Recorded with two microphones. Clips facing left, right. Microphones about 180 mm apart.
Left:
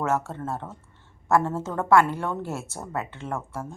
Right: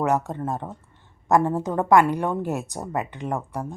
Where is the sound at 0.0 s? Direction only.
15° right (ahead or behind).